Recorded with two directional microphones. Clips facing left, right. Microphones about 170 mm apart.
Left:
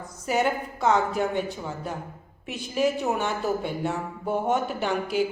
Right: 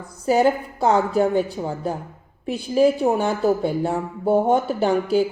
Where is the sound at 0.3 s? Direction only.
35° right (ahead or behind).